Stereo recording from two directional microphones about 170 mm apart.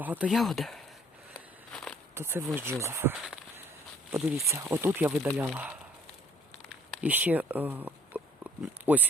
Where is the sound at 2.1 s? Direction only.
15° right (ahead or behind).